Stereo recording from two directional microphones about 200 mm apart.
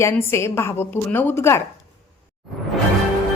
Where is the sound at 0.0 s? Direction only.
15° left (ahead or behind).